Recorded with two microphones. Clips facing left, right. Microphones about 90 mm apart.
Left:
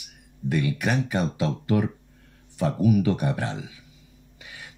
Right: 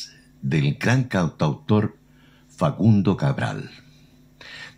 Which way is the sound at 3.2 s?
90° right.